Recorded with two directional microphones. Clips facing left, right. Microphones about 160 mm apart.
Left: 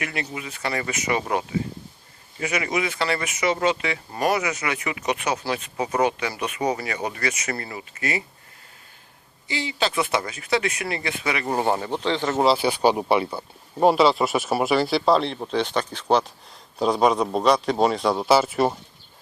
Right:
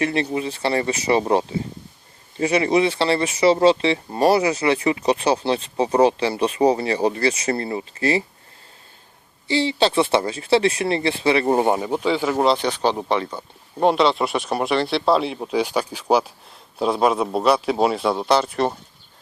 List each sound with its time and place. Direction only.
0.0 s speech: 30° right (ahead or behind)
9.5 s speech: 30° right (ahead or behind)
11.6 s speech: 15° right (ahead or behind)
12.4 s speech: 5° left (ahead or behind)